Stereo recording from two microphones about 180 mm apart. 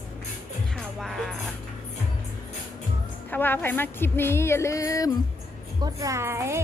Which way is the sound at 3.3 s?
10° left (ahead or behind).